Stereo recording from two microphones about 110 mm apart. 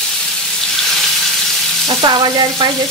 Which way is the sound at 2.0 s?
45° right (ahead or behind).